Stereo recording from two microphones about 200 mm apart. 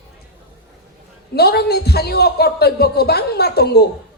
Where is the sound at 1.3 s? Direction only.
50° left (ahead or behind).